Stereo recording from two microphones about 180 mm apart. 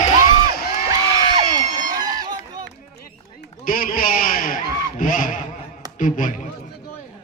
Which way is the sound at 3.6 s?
55° left (ahead or behind).